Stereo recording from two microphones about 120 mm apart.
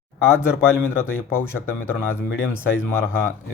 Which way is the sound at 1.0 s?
20° left (ahead or behind).